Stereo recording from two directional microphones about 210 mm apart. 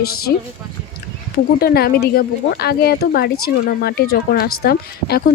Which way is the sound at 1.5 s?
50° left (ahead or behind).